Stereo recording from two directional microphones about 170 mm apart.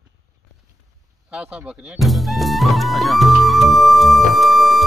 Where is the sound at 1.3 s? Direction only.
5° right (ahead or behind).